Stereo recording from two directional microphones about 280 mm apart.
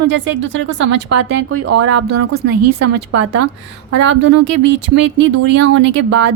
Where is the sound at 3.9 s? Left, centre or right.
Right.